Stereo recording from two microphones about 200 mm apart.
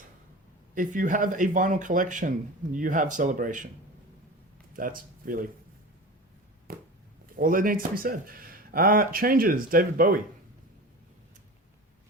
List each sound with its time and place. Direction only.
0.7 s speech: 40° right (ahead or behind)
4.7 s speech: 45° right (ahead or behind)
6.7 s a sound: 45° right (ahead or behind)
7.3 s speech: 45° right (ahead or behind)